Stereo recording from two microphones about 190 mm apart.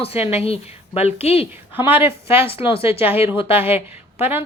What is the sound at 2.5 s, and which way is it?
Speech, 30° left (ahead or behind).